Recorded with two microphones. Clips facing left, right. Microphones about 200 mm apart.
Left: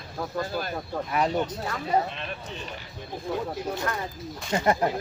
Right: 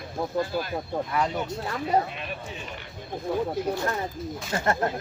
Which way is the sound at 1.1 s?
20° left (ahead or behind).